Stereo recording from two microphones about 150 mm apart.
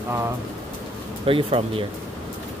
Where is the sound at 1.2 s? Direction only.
35° right (ahead or behind).